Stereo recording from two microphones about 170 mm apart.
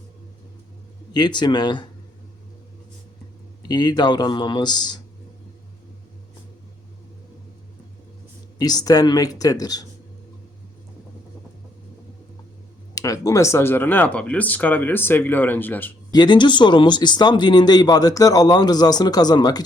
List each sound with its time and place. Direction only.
1.1 s speech: 25° left (ahead or behind)
3.7 s speech: 25° left (ahead or behind)
8.5 s speech: 25° left (ahead or behind)
12.9 s speech: 20° left (ahead or behind)
16.1 s speech: 25° left (ahead or behind)